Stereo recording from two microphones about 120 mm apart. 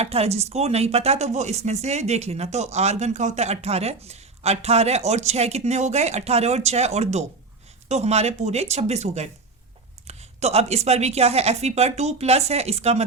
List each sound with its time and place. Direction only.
0.0 s speech: 60° right (ahead or behind)